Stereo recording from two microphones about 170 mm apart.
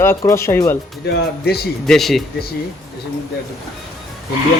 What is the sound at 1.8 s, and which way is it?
Speech, centre (ahead or behind).